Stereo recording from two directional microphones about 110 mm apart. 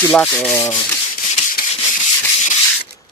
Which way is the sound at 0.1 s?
5° left (ahead or behind).